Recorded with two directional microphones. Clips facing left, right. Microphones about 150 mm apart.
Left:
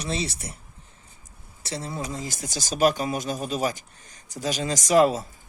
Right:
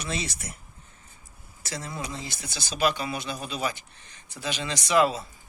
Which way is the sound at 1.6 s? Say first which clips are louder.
Left 3 dB; 30° left (ahead or behind).